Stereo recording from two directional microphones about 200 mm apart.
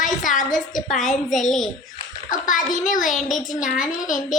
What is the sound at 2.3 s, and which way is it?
A woman's voice, 40° left (ahead or behind).